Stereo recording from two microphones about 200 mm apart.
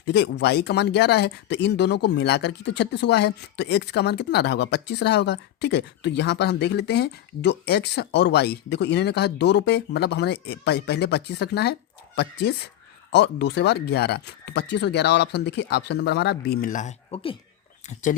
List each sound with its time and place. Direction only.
0.0 s speech: 55° left (ahead or behind); by 18.2 s 40° left (ahead or behind)